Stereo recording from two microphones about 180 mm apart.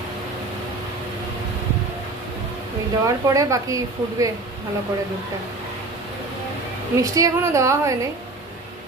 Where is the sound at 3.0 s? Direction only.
20° right (ahead or behind).